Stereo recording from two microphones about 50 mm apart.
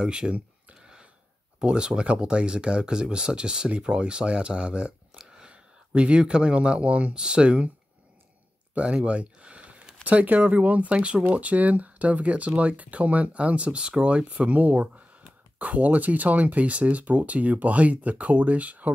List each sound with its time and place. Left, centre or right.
0.0 s speech: centre
0.7 s a sound: centre
1.6 s speech: centre
8.7 s speech: right